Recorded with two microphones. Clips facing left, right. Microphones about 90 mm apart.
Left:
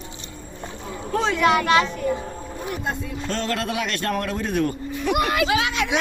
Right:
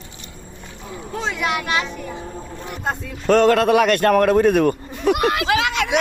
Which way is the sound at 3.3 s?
60° right (ahead or behind).